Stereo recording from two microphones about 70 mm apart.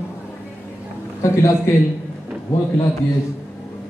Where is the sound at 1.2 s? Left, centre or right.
Left.